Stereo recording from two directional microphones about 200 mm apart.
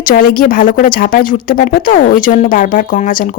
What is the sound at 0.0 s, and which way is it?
A woman's voice, 45° left (ahead or behind).